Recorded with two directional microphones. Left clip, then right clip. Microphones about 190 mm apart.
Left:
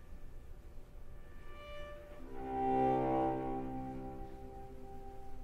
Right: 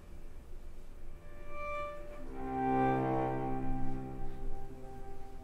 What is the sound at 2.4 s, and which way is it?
Music, 20° left (ahead or behind).